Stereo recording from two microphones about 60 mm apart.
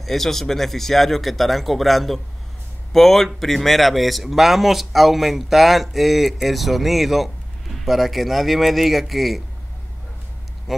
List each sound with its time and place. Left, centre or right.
0.0 s a man's voice: centre